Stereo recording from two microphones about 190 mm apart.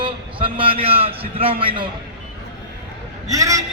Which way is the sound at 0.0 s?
25° right (ahead or behind).